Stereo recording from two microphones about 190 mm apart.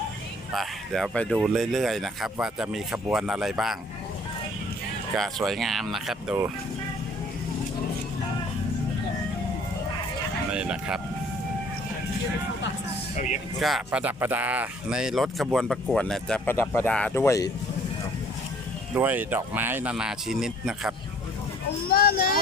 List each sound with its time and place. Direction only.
0.5 s speech: centre (ahead or behind)
5.1 s speech: centre (ahead or behind)
10.5 s speech: 5° right (ahead or behind)
13.6 s speech: centre (ahead or behind); by 17.5 s 15° left (ahead or behind)
18.9 s speech: 10° right (ahead or behind)
21.8 s a sound: 50° left (ahead or behind)